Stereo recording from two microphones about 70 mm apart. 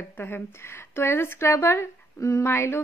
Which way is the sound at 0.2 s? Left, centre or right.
Left.